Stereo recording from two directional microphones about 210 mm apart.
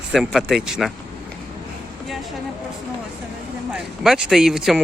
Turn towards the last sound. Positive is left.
turn(degrees=0)  # may be behind; listen again after turning